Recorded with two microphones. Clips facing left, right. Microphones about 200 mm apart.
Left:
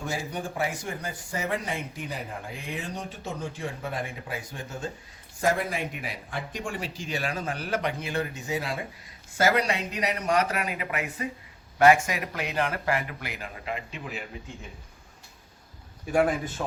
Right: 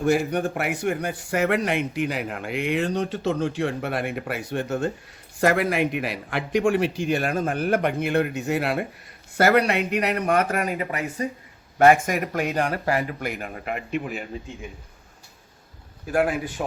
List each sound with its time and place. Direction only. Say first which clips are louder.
0.0 s a man's voice: right 11 dB; 65° right (ahead or behind); by 11.3 s 40° right (ahead or behind)
11.8 s a man's voice: right 3 dB; 50° right (ahead or behind)
16.0 s speech: right 1 dB; 5° right (ahead or behind)